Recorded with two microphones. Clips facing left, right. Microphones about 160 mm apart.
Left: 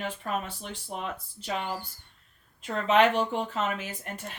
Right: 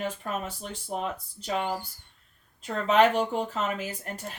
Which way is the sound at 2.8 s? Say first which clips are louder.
Right 1 dB; 40° right (ahead or behind).